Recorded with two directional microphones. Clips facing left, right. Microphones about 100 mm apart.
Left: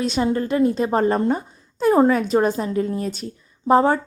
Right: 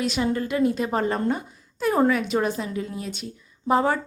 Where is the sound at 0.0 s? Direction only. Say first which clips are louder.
Left 3 dB; 35° left (ahead or behind).